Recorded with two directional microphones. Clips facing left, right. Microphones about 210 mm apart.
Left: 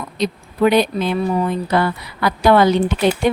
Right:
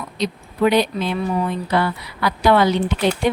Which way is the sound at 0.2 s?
50° left (ahead or behind).